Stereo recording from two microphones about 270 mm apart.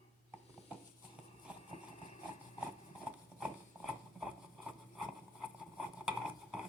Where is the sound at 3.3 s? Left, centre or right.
Centre.